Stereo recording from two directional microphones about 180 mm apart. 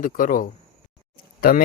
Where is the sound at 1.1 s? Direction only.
55° left (ahead or behind).